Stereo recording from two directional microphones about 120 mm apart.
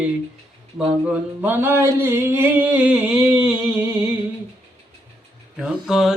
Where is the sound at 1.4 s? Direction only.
15° right (ahead or behind).